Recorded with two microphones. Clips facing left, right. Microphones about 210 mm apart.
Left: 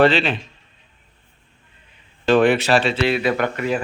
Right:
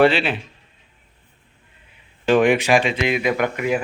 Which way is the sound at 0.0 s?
10° right (ahead or behind).